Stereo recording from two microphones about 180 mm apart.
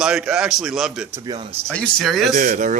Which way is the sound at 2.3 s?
55° right (ahead or behind).